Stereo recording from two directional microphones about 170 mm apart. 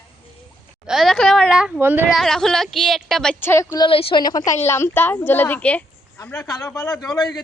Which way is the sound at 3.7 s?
30° left (ahead or behind).